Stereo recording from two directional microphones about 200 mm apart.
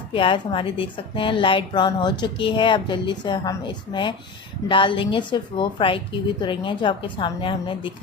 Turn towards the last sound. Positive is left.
turn(degrees=25)  # may be behind; listen again after turning